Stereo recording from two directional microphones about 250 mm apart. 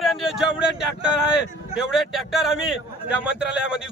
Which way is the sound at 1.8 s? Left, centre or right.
Centre.